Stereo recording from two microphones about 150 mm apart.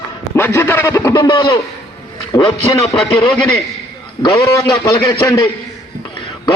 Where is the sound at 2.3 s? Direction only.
35° left (ahead or behind).